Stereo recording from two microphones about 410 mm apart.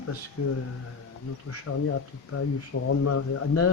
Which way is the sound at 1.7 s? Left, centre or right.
Left.